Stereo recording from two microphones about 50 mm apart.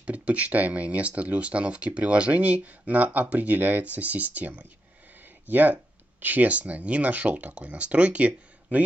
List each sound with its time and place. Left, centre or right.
0.0 s speech: right